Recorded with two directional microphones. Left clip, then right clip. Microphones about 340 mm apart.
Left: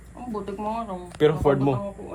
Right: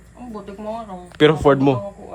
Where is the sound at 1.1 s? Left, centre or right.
Right.